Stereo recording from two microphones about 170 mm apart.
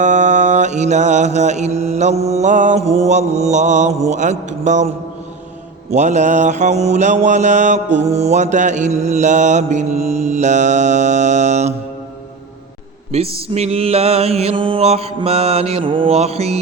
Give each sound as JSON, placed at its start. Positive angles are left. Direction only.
{"t": 0.0, "sound": "mantra", "side_deg": -45}
{"t": 5.9, "sound": "mantra", "side_deg": -45}
{"t": 13.1, "sound": "mantra", "side_deg": -35}